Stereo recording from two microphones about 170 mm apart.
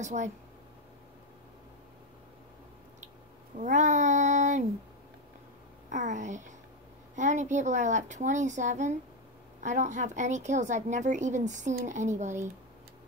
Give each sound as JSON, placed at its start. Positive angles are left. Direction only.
{"t": 0.0, "sound": "speech", "side_deg": -45}
{"t": 3.5, "sound": "speech", "side_deg": -45}
{"t": 5.9, "sound": "speech", "side_deg": -45}